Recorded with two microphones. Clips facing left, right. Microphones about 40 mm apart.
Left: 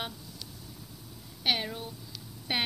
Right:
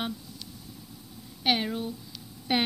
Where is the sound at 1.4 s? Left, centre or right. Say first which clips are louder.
Right 4 dB; centre.